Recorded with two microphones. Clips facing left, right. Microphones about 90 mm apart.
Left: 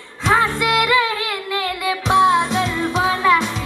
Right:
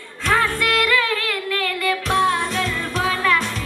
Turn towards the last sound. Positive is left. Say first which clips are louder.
# left 4 dB
turn(degrees=20)  # may be behind; listen again after turning